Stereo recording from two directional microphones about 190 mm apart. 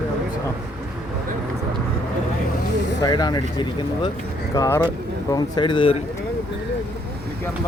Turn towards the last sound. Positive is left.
turn(degrees=25)  # may be behind; listen again after turning